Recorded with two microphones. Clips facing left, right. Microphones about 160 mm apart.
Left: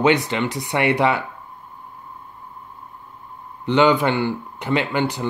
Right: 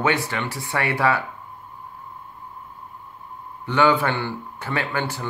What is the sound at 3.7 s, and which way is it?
Speech, 20° left (ahead or behind).